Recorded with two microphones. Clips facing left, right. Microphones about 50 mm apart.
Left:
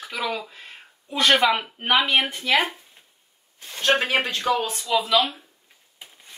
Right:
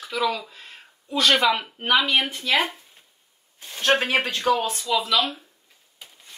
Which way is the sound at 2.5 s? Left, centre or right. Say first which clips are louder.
Left 1 dB; centre.